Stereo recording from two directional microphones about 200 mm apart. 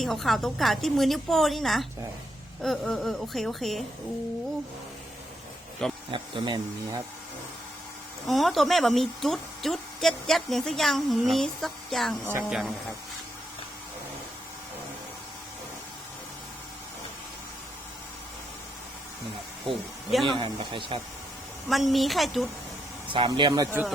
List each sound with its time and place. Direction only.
0.0 s a woman's voice: centre (ahead or behind)
6.1 s speech: 25° right (ahead or behind)
8.3 s a woman's voice: centre (ahead or behind)
20.2 s speech: 25° right (ahead or behind)
21.7 s a woman's voice: centre (ahead or behind)
23.1 s speech: 25° right (ahead or behind)